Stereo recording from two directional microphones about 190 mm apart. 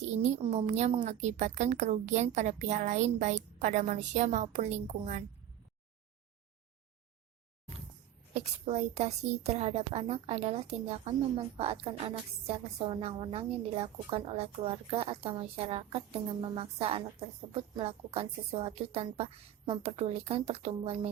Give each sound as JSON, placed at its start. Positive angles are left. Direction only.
{"t": 0.0, "sound": "a woman's voice", "side_deg": -35}
{"t": 8.3, "sound": "a woman's voice", "side_deg": -35}